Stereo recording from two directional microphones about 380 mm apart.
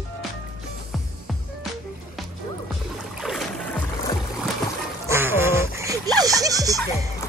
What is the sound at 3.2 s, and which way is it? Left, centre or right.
Boat, centre.